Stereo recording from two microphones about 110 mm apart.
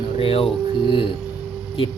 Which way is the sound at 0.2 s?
60° left (ahead or behind).